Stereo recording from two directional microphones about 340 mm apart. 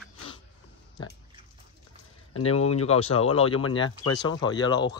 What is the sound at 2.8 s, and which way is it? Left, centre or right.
Speech, centre.